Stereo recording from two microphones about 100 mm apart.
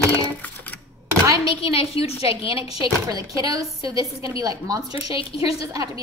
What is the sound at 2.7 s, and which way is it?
Speech, 40° right (ahead or behind).